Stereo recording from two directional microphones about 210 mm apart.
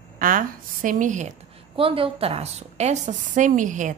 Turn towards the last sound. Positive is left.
turn(degrees=-35)  # may be behind; listen again after turning